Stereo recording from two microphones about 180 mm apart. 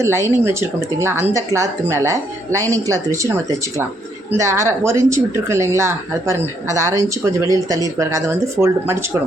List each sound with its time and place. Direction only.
0.0 s speech: 15° right (ahead or behind)